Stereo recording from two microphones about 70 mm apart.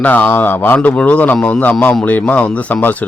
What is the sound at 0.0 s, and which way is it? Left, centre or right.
Speech, left.